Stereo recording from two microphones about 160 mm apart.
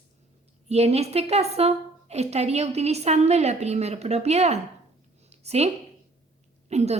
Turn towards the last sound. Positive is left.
turn(degrees=-45)  # may be behind; listen again after turning